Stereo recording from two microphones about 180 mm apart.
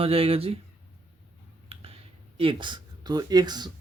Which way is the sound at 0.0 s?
30° right (ahead or behind).